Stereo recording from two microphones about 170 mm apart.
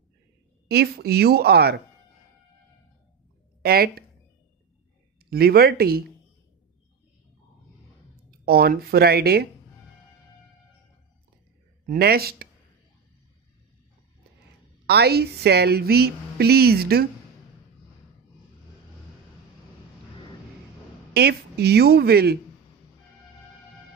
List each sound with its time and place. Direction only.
0.7 s a woman's voice: 70° right (ahead or behind)
3.6 s speech: 65° right (ahead or behind)
5.2 s speech: 65° right (ahead or behind)
8.3 s speech: 65° right (ahead or behind)
11.8 s speech: 60° right (ahead or behind)
14.9 s a woman's voice: 70° right (ahead or behind)
21.1 s a woman's voice: 70° right (ahead or behind)